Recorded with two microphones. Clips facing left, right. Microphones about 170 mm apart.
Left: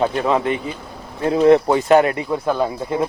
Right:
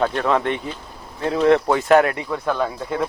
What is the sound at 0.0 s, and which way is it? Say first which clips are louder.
Speech: left 2 dB; 5° left (ahead or behind).